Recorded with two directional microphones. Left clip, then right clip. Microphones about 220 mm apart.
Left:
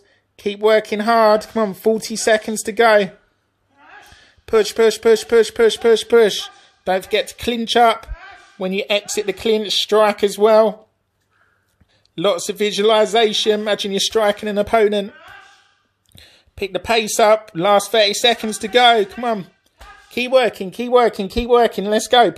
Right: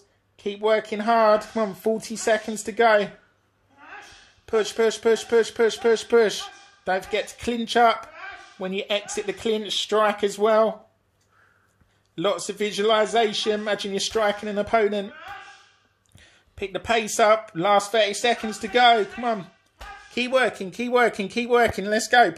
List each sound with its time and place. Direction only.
0.4 s speech: 35° left (ahead or behind)
4.5 s speech: 35° left (ahead or behind)
12.2 s speech: 35° left (ahead or behind)
16.2 s speech: 30° left (ahead or behind)